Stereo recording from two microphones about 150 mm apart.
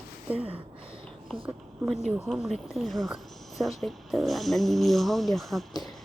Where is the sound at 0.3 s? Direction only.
40° right (ahead or behind).